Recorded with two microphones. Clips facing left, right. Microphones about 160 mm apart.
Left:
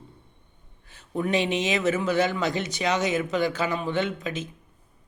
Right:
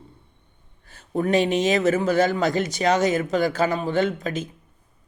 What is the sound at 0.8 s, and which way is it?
A man's voice, 45° right (ahead or behind).